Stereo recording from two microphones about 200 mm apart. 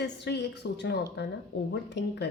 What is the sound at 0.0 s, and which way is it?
A woman's voice, 60° left (ahead or behind).